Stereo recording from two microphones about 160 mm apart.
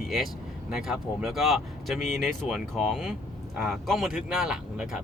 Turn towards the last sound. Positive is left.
turn(degrees=-5)  # may be behind; listen again after turning